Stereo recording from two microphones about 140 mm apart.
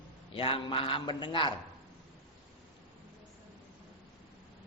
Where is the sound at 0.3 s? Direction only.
40° left (ahead or behind).